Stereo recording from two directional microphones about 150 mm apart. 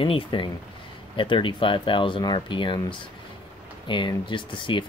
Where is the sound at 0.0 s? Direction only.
35° left (ahead or behind).